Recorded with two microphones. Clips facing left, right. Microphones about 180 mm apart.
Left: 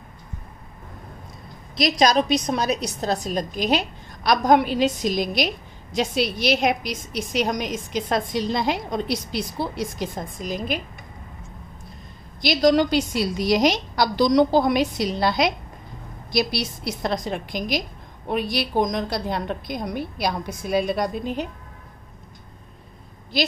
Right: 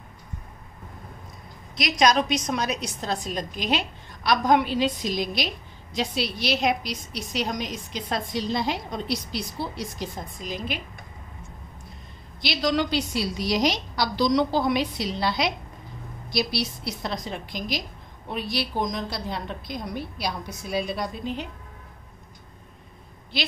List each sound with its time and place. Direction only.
1.8 s a woman's voice: 35° left (ahead or behind)
12.4 s a woman's voice: 45° left (ahead or behind)
19.0 s a woman's voice: 50° left (ahead or behind)